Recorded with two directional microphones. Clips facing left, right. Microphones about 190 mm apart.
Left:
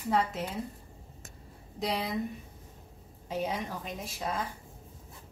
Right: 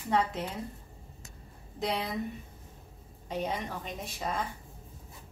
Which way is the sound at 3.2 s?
Centre (ahead or behind).